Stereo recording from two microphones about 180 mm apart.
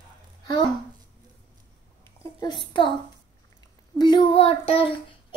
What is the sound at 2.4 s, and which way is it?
Speech, 25° left (ahead or behind).